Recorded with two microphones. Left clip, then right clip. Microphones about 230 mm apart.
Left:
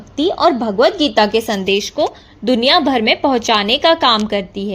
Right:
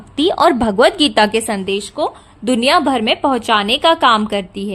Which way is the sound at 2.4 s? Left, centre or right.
Centre.